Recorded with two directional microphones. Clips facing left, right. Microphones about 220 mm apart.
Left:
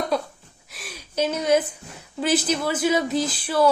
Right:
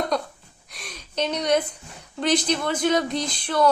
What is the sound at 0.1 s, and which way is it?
Speech, 5° left (ahead or behind).